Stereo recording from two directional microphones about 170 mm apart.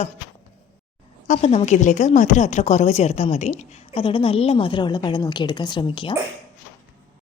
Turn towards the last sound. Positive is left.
turn(degrees=30)  # may be behind; listen again after turning